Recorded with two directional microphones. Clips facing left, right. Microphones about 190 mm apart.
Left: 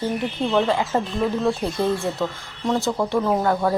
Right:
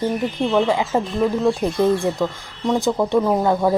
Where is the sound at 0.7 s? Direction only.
15° right (ahead or behind).